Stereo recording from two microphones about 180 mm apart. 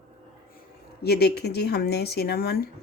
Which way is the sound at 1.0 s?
60° left (ahead or behind).